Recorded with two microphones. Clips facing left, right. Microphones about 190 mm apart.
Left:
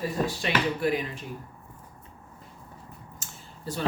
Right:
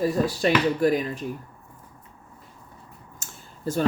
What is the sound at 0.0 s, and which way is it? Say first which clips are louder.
Speech: right 6 dB; 40° right (ahead or behind).